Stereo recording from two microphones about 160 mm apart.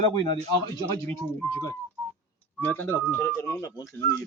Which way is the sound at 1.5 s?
15° left (ahead or behind).